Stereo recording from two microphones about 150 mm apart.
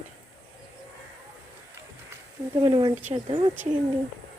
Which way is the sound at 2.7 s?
30° right (ahead or behind).